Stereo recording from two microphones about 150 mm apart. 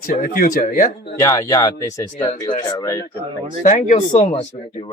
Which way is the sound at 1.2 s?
20° left (ahead or behind).